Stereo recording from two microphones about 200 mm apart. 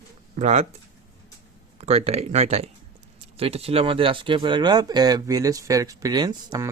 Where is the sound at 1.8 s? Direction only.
30° right (ahead or behind).